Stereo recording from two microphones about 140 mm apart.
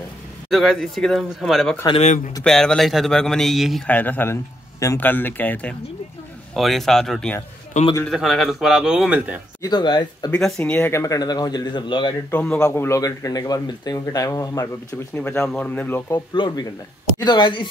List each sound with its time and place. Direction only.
0.5 s speech: centre (ahead or behind)
3.9 s a man's voice: 10° left (ahead or behind)
7.7 s a man's voice: 60° left (ahead or behind)
8.1 s speech: centre (ahead or behind)
9.6 s speech: 30° left (ahead or behind)
10.3 s speech: 10° left (ahead or behind); by 12.2 s 35° left (ahead or behind)
12.3 s a man's voice: 10° left (ahead or behind)
16.3 s speech: 30° left (ahead or behind)